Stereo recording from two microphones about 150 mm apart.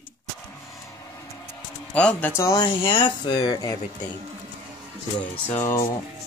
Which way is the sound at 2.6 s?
35° left (ahead or behind).